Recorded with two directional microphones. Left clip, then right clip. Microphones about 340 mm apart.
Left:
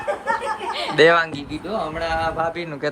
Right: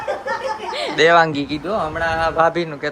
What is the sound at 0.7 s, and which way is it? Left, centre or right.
Chuckle, right.